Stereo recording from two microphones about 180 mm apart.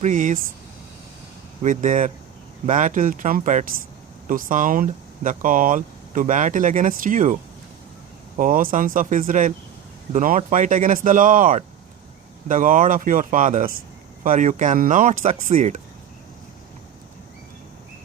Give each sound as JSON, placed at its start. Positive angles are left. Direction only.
{"t": 0.0, "sound": "speech", "side_deg": -45}
{"t": 1.6, "sound": "speech", "side_deg": -45}
{"t": 8.4, "sound": "speech", "side_deg": -50}